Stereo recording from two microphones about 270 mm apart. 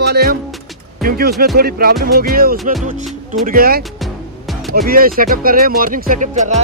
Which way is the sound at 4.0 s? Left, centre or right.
Centre.